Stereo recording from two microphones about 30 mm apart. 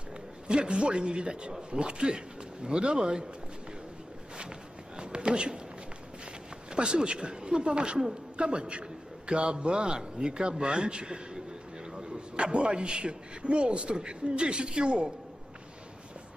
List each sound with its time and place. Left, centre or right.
0.5 s a man's voice: right
4.9 s a sound: right
6.7 s a man's voice: right